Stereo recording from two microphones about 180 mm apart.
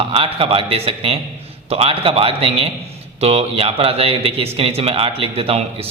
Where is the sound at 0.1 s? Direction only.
30° right (ahead or behind).